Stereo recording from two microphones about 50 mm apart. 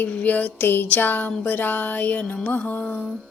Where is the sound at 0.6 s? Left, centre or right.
Left.